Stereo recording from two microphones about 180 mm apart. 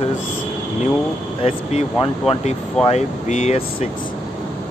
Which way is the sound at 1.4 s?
30° left (ahead or behind).